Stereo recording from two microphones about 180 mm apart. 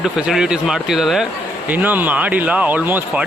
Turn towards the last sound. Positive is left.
turn(degrees=-10)  # may be behind; listen again after turning